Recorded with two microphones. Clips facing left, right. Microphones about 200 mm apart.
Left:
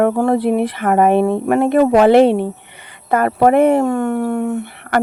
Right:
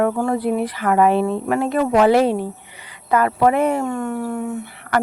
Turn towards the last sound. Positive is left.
turn(degrees=60)  # may be behind; listen again after turning